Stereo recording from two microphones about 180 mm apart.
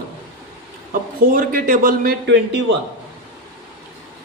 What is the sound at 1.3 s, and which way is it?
A man's voice, 50° right (ahead or behind).